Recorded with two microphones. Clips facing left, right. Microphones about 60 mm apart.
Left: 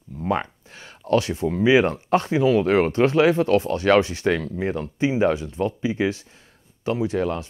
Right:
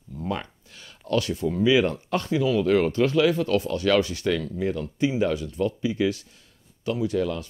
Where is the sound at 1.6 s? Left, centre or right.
Left.